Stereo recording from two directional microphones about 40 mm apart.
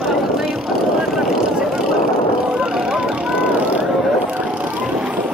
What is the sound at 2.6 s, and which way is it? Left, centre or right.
Vehicle, right.